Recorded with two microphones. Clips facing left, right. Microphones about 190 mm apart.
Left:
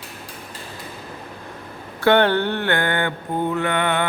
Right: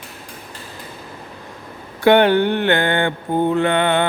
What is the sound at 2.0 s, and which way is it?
Mantra, 15° right (ahead or behind).